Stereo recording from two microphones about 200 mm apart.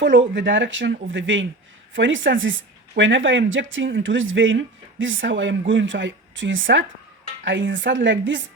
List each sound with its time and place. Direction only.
0.0 s speech: 65° right (ahead or behind)